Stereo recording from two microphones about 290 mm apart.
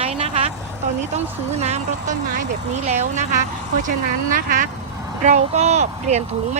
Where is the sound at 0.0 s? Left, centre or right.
Right.